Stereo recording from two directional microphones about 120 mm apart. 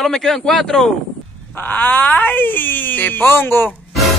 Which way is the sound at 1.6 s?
15° left (ahead or behind).